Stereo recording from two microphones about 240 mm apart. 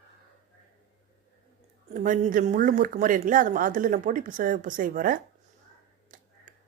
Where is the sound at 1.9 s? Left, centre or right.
Right.